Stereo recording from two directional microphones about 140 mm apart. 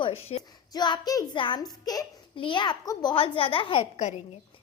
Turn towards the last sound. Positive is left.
turn(degrees=55)  # may be behind; listen again after turning